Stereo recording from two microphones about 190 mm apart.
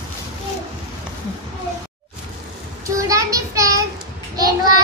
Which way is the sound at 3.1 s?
15° right (ahead or behind).